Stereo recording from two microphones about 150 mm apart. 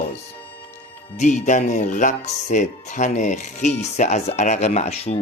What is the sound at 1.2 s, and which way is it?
Speech, 55° left (ahead or behind).